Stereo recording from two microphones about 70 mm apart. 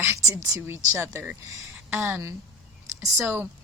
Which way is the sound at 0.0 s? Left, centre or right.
Right.